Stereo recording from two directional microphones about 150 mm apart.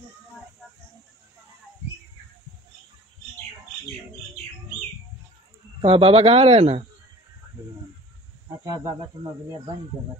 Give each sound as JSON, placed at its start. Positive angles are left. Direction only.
{"t": 5.8, "sound": "speech", "side_deg": -40}